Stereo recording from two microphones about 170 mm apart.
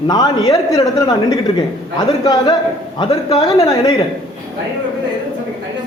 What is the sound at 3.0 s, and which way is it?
A man's voice, 25° left (ahead or behind).